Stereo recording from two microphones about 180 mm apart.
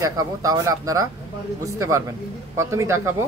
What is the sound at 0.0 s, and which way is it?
Speech, 20° right (ahead or behind).